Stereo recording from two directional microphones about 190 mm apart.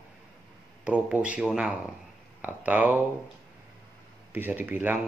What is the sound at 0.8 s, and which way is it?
A man's voice, 5° right (ahead or behind).